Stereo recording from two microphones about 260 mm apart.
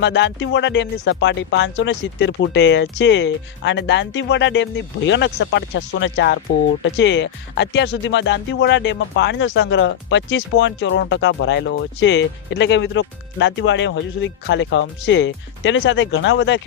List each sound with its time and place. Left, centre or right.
0.0 s speech: left